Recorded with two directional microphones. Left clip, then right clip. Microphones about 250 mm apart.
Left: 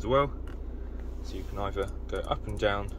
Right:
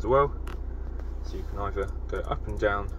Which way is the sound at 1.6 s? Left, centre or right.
Centre.